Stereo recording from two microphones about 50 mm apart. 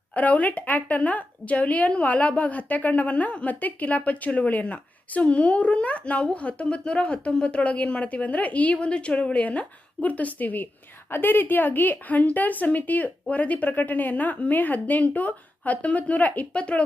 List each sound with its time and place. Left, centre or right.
0.1 s a woman's voice: left